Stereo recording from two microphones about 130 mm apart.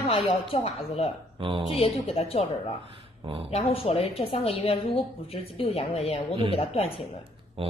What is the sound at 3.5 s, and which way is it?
Speech, 50° left (ahead or behind).